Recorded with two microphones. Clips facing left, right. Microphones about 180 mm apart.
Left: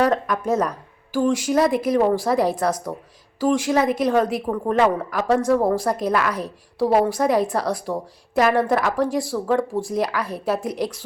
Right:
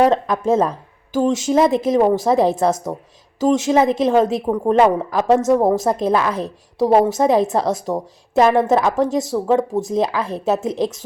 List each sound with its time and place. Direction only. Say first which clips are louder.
0.0 s a woman's voice: right 4 dB; 25° right (ahead or behind)